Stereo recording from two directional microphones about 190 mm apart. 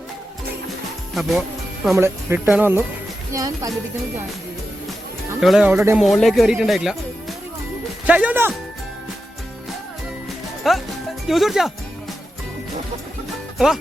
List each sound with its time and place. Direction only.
1.1 s speech: centre (ahead or behind)
2.0 s speech: 15° right (ahead or behind)
5.4 s speech: 5° right (ahead or behind)
6.0 s speech: centre (ahead or behind)
10.2 s music: centre (ahead or behind)
11.3 s speech: centre (ahead or behind)